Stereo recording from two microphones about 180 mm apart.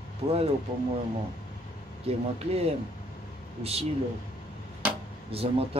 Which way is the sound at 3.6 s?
35° right (ahead or behind).